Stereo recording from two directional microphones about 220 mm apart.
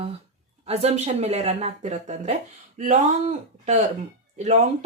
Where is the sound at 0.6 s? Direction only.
30° right (ahead or behind).